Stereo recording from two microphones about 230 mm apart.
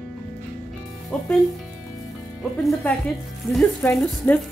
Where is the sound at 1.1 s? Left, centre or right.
Centre.